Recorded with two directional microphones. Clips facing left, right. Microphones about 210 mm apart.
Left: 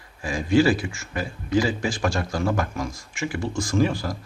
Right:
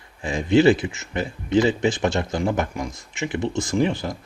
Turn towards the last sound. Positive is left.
turn(degrees=-20)  # may be behind; listen again after turning